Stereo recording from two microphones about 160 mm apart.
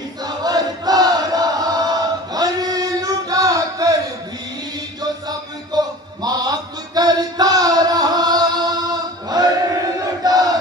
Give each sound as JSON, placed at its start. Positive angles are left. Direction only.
{"t": 0.2, "sound": "chant", "side_deg": -25}
{"t": 5.7, "sound": "music", "side_deg": -25}
{"t": 10.2, "sound": "battle cry", "side_deg": -25}